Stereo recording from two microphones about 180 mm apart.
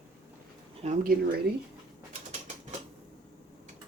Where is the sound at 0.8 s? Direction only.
50° right (ahead or behind).